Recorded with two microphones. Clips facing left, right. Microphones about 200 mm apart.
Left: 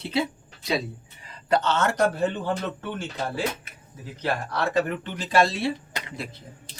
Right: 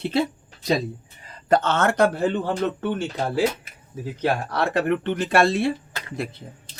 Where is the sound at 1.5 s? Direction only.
50° right (ahead or behind).